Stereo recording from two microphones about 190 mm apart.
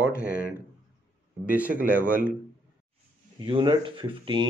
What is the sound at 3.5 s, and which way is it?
Speech, 25° right (ahead or behind).